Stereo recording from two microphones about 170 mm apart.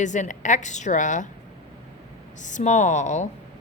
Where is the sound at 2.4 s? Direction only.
45° left (ahead or behind).